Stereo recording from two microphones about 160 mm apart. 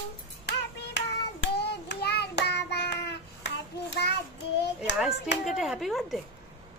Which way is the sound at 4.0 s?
90° left.